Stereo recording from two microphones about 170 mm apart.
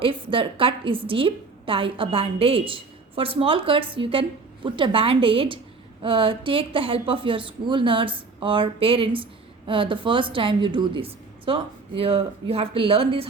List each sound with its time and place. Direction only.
0.0 s a woman's voice: 30° right (ahead or behind)